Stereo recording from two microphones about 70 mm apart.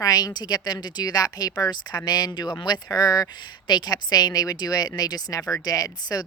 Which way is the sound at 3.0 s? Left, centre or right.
Left.